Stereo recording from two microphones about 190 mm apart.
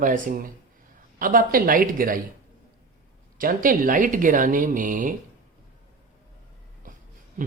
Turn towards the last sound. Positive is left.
turn(degrees=-45)  # may be behind; listen again after turning